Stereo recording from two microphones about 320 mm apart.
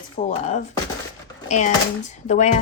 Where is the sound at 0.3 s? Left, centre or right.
Left.